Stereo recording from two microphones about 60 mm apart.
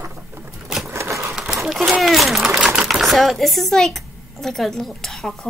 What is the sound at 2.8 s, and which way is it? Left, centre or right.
Speech, centre.